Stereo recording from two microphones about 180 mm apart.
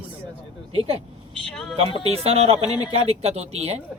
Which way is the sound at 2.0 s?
35° right (ahead or behind).